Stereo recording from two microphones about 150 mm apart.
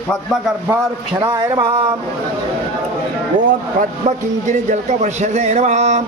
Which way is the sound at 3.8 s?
55° right (ahead or behind).